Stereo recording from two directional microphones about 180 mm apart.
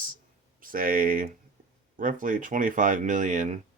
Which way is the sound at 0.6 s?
50° right (ahead or behind).